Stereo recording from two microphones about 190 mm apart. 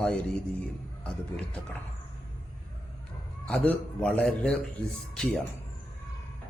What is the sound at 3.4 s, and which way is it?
A man's voice, 5° left (ahead or behind).